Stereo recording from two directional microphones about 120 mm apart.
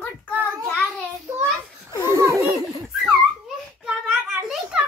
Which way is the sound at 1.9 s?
35° left (ahead or behind).